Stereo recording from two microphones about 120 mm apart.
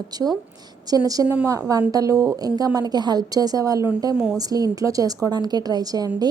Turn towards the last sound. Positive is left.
turn(degrees=-30)  # may be behind; listen again after turning